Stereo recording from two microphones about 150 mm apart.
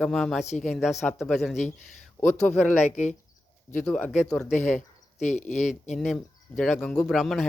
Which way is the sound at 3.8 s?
5° left (ahead or behind).